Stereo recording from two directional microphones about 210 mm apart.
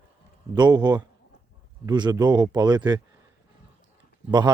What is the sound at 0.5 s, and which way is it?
Speech, 20° right (ahead or behind).